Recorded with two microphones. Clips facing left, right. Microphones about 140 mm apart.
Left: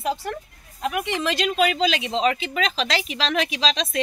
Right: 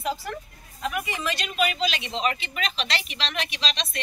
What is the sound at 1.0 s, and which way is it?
Speech, 90° left.